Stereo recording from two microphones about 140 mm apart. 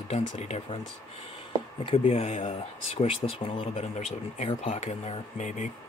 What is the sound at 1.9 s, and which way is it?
Speech, 45° left (ahead or behind).